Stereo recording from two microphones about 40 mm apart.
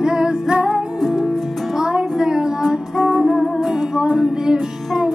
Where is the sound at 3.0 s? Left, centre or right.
Right.